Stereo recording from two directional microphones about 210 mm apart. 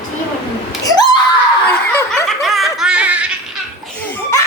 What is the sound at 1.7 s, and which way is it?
Snicker, 10° left (ahead or behind).